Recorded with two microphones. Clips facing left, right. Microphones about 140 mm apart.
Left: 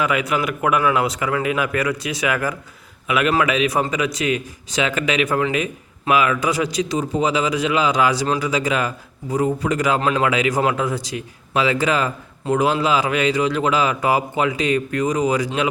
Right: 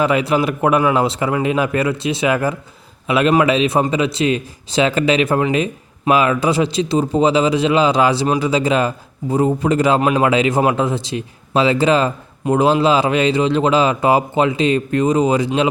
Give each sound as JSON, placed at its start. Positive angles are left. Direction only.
{"t": 0.0, "sound": "speech", "side_deg": -30}
{"t": 10.0, "sound": "a man's voice", "side_deg": -15}
{"t": 10.2, "sound": "speech", "side_deg": -30}